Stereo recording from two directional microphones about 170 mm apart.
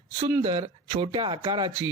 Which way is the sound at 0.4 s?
30° right (ahead or behind).